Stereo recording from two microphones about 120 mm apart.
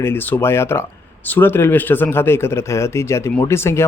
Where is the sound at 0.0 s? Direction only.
20° left (ahead or behind).